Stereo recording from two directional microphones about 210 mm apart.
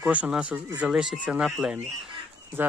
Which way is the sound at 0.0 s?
5° right (ahead or behind).